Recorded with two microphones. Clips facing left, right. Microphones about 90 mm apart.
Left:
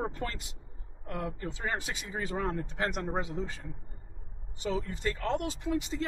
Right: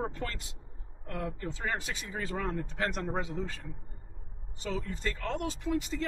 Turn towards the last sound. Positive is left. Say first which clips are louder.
# even
turn(degrees=20)  # may be behind; listen again after turning